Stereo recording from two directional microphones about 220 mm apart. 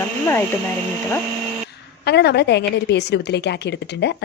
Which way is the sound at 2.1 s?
50° left (ahead or behind).